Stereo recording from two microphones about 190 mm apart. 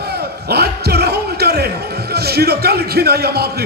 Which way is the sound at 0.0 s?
60° right (ahead or behind).